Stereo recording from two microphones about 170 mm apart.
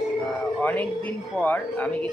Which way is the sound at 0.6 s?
10° left (ahead or behind).